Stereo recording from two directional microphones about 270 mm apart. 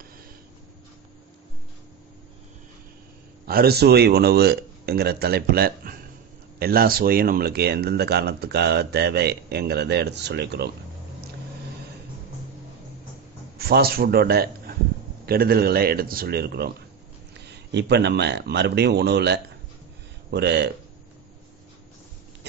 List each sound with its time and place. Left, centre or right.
3.4 s speech: right
13.6 s speech: right